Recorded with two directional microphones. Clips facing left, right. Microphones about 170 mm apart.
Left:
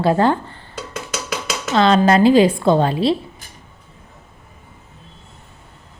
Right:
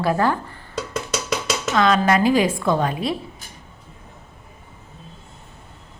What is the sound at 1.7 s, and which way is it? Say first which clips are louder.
A woman's voice: left 4 dB; 30° left (ahead or behind).